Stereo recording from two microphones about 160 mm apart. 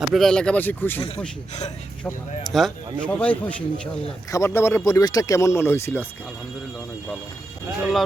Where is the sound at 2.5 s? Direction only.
5° left (ahead or behind).